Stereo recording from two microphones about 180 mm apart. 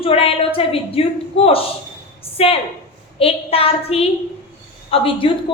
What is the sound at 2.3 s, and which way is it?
A woman's voice, 30° left (ahead or behind).